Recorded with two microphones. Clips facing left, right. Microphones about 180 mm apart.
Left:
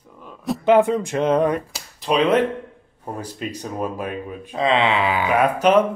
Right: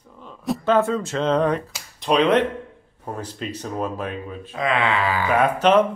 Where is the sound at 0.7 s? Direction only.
15° left (ahead or behind).